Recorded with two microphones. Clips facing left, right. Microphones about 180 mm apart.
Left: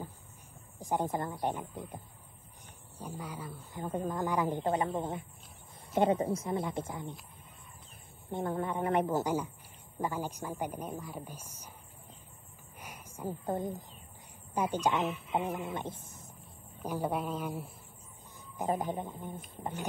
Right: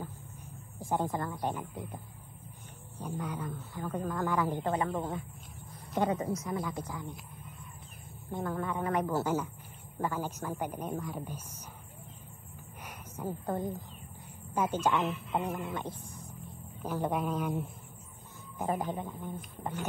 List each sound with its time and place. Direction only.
0.7 s speech: 15° left (ahead or behind)
3.0 s speech: 10° left (ahead or behind)
3.8 s a man's voice: 20° left (ahead or behind)
8.3 s a man's voice: 25° left (ahead or behind)
12.8 s a sound: 10° left (ahead or behind)
14.5 s speech: 15° left (ahead or behind)
15.0 s a sound: centre (ahead or behind)
15.8 s wild animals: 20° left (ahead or behind)
16.8 s speech: 10° left (ahead or behind)
18.9 s a man's voice: 20° left (ahead or behind)